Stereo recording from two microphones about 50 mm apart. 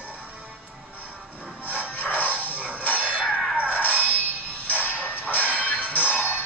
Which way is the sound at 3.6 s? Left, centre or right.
Right.